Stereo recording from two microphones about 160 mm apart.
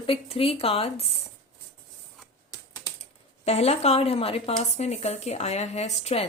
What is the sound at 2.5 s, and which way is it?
Typing, 20° left (ahead or behind).